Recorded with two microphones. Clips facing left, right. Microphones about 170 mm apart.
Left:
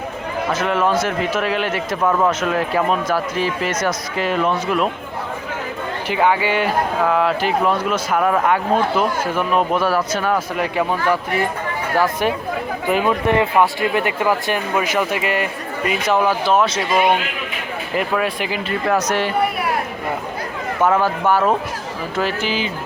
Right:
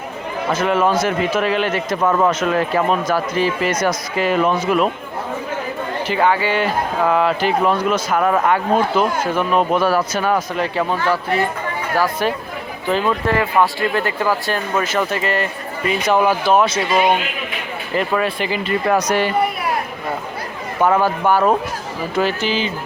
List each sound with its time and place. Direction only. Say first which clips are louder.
0.5 s speech: right 2 dB; centre (ahead or behind)
2.0 s speech: right 1 dB; 5° right (ahead or behind)
6.1 s speech: even; 15° left (ahead or behind)
7.0 s speech: right 3 dB; centre (ahead or behind)
10.6 s speech: even; 15° left (ahead or behind)
15.9 s speech: right 2 dB; centre (ahead or behind)
20.8 s speech: right 1 dB; centre (ahead or behind)